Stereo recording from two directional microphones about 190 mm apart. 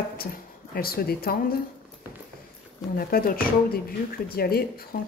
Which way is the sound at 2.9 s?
50° left (ahead or behind).